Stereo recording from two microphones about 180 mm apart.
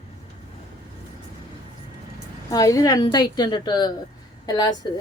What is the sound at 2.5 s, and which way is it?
A woman's voice, 20° left (ahead or behind).